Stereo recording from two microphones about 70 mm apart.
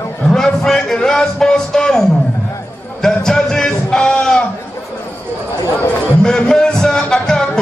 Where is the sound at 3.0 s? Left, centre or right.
Centre.